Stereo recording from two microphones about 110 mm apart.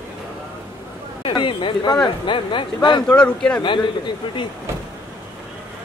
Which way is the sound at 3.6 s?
45° left (ahead or behind).